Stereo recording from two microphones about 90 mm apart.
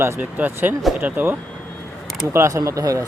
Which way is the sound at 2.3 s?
30° right (ahead or behind).